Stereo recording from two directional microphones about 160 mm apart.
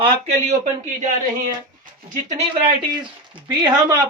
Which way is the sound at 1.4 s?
55° right (ahead or behind).